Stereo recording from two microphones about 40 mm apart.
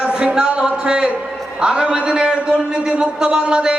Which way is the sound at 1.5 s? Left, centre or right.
Right.